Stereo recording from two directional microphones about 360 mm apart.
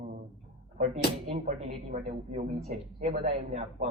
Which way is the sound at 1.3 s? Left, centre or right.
Centre.